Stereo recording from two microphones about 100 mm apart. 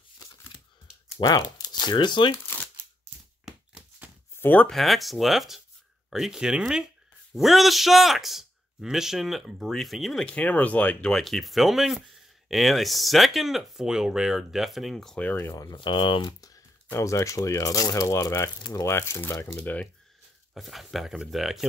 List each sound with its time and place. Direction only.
1.2 s speech: 45° left (ahead or behind)
4.4 s speech: 15° left (ahead or behind)
4.6 s speech: centre (ahead or behind)
10.2 s speech: 15° left (ahead or behind)
11.1 s speech: centre (ahead or behind)
15.2 s speech: 15° left (ahead or behind)
15.7 s speech: 55° left (ahead or behind)
16.3 s speech: 35° left (ahead or behind); by 19.9 s 15° left (ahead or behind)
20.5 s speech: centre (ahead or behind)